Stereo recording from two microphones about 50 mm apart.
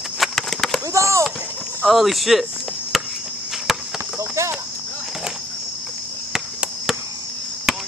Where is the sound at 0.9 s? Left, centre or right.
Right.